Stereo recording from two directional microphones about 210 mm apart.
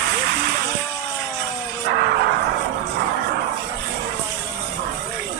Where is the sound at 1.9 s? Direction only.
50° right (ahead or behind).